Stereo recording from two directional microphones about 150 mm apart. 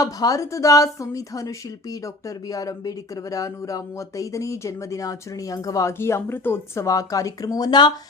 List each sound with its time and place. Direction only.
0.0 s speech: 25° left (ahead or behind)